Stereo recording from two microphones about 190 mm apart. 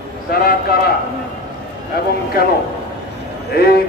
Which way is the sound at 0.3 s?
55° left (ahead or behind).